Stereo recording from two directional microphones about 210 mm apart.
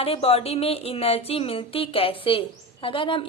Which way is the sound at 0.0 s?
30° left (ahead or behind).